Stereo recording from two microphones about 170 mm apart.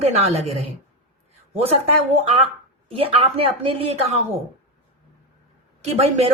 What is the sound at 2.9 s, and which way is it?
A woman's voice, 35° right (ahead or behind).